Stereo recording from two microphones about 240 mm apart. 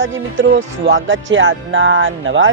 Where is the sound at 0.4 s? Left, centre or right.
Right.